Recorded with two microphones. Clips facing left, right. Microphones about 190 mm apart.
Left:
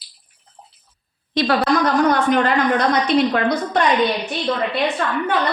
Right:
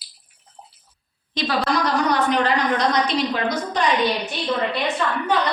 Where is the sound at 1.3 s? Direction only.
60° left (ahead or behind).